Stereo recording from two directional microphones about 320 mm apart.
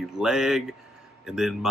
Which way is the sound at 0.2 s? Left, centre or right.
Centre.